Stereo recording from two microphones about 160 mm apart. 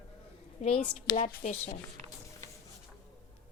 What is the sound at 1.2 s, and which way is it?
Speech, 60° left (ahead or behind).